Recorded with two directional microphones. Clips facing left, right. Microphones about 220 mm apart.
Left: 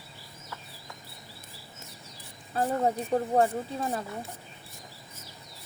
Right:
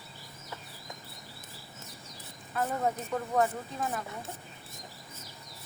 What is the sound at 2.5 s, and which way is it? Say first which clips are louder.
Speech: left 4 dB; 30° left (ahead or behind).